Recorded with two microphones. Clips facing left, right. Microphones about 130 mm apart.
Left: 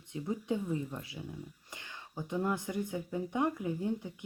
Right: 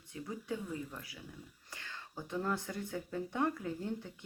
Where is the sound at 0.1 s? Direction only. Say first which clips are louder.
Left 6 dB; 20° left (ahead or behind).